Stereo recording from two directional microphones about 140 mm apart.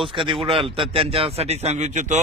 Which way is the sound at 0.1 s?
35° right (ahead or behind).